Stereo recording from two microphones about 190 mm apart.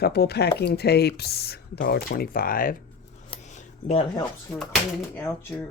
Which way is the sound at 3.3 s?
35° left (ahead or behind).